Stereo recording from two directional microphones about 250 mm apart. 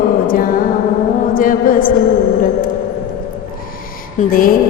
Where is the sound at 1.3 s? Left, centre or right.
Left.